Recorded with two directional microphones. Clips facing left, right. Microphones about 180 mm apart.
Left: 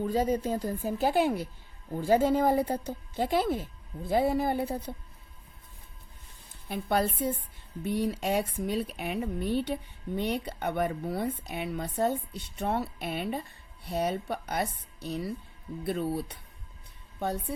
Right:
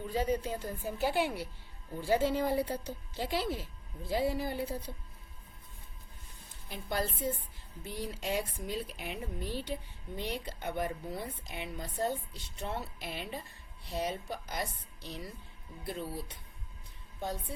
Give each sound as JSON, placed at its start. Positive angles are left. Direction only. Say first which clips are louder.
{"t": 0.0, "sound": "speech", "louder": "left 5 dB", "side_deg": 45}
{"t": 6.7, "sound": "speech", "louder": "left 7 dB", "side_deg": 65}
{"t": 15.9, "sound": "speech", "louder": "left 8 dB", "side_deg": 65}